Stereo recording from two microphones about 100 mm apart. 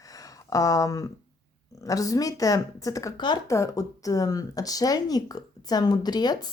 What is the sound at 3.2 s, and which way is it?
Speech, 50° left (ahead or behind).